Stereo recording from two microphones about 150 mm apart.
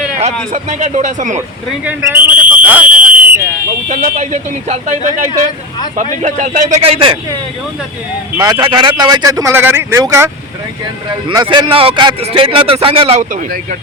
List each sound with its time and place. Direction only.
0.5 s speech: 50° right (ahead or behind)
1.4 s a sound: 10° right (ahead or behind)
3.8 s speech: 65° right (ahead or behind)
4.1 s speech: 50° right (ahead or behind)
6.8 s speech: 40° right (ahead or behind)
8.4 s speech: 30° right (ahead or behind)
11.3 s speech: 30° right (ahead or behind)
13.3 s speech: 60° right (ahead or behind)